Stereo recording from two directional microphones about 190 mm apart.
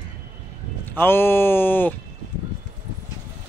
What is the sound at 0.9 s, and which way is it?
Speech, 10° left (ahead or behind).